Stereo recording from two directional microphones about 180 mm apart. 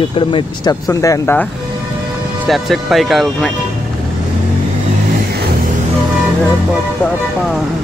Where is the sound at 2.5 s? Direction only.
Centre (ahead or behind).